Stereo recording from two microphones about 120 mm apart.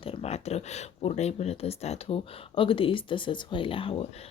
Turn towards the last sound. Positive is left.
turn(degrees=50)  # may be behind; listen again after turning